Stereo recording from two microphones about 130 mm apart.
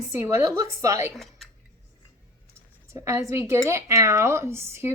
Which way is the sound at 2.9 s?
20° right (ahead or behind).